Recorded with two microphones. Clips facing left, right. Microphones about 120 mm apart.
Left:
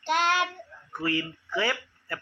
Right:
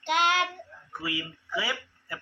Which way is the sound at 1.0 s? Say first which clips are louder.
Left 6 dB; 10° right (ahead or behind).